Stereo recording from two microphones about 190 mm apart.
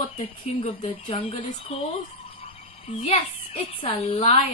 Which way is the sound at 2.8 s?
35° left (ahead or behind).